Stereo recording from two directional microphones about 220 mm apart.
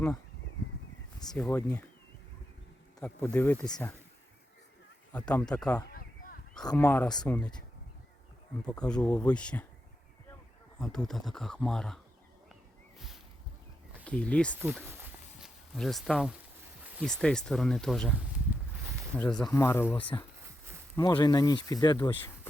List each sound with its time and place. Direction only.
1.4 s speech: 10° left (ahead or behind)
3.2 s speech: 10° left (ahead or behind)
5.1 s speech: 5° left (ahead or behind)
5.9 s a sound: 40° left (ahead or behind)
6.6 s speech: 15° left (ahead or behind)
8.6 s speech: 5° left (ahead or behind)
10.8 s speech: 5° left (ahead or behind)
14.0 s speech: 5° left (ahead or behind)
14.5 s a sound: centre (ahead or behind)
16.8 s speech: centre (ahead or behind)
18.9 s a sound: 5° left (ahead or behind)
19.5 s speech: 10° left (ahead or behind)
20.9 s speech: 20° left (ahead or behind)